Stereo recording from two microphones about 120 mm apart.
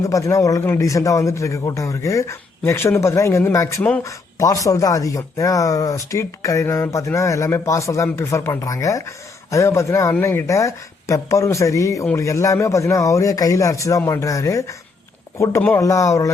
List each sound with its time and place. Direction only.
0.0 s speech: 25° left (ahead or behind)